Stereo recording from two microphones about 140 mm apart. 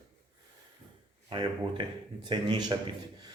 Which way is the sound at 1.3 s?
35° right (ahead or behind).